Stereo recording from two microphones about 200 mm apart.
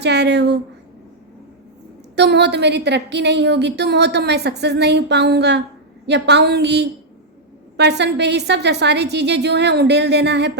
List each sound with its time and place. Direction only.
0.0 s a woman's voice: 55° right (ahead or behind)
2.1 s a woman's voice: 60° right (ahead or behind)